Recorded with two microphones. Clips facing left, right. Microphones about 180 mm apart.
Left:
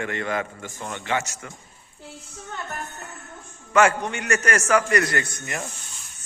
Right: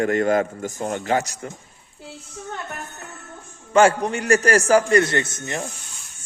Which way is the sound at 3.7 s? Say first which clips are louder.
Right 3 dB; 30° right (ahead or behind).